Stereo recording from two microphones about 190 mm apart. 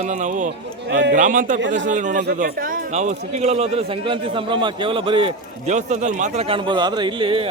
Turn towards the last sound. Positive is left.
turn(degrees=-25)  # may be behind; listen again after turning